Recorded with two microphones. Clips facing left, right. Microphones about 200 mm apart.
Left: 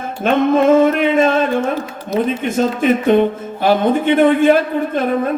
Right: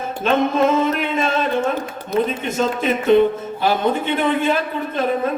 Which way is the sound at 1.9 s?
55° right (ahead or behind).